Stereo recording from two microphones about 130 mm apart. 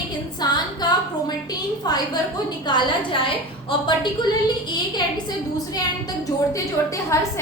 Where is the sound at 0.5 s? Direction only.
30° left (ahead or behind).